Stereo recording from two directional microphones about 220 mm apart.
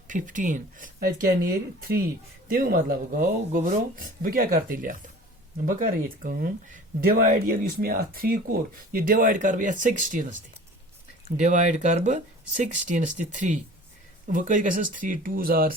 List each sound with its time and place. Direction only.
0.1 s speech: 35° right (ahead or behind)
11.3 s speech: 35° right (ahead or behind)